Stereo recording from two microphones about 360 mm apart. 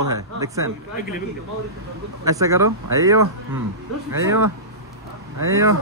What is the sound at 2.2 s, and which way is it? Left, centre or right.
Speech, centre.